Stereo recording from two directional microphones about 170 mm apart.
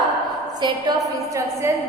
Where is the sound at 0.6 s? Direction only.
25° right (ahead or behind).